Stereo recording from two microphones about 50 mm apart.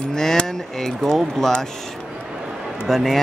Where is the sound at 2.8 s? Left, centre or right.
Centre.